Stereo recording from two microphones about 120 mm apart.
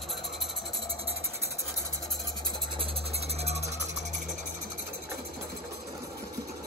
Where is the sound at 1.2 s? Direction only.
25° right (ahead or behind).